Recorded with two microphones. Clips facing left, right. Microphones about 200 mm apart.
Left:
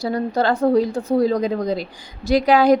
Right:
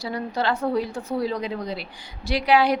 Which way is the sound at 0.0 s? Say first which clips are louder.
Left 6 dB; 45° left (ahead or behind).